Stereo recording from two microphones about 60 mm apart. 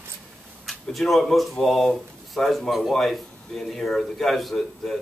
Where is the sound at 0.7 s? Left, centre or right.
Centre.